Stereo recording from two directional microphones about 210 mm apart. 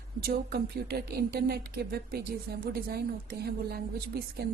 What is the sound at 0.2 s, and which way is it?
Speech, 45° right (ahead or behind).